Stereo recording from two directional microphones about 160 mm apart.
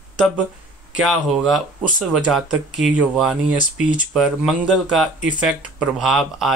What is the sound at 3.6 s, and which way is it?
Speech, 55° left (ahead or behind).